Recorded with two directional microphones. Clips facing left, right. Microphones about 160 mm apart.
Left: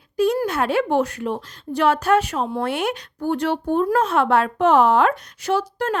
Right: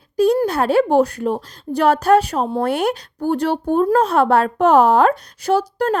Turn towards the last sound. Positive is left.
turn(degrees=-35)  # may be behind; listen again after turning